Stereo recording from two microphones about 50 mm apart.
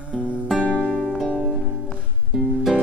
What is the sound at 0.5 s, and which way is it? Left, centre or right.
Music, left.